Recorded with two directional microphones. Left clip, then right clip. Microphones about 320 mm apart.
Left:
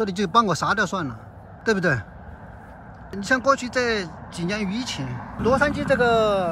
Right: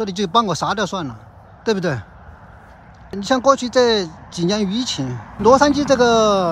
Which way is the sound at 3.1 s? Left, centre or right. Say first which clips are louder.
Right 5 dB; centre.